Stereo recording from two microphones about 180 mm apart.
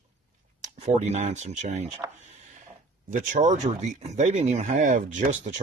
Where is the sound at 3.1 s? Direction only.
45° right (ahead or behind).